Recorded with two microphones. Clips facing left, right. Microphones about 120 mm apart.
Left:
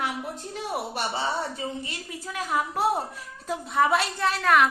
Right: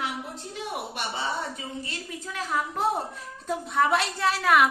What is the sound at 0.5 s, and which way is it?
Speech, 35° left (ahead or behind).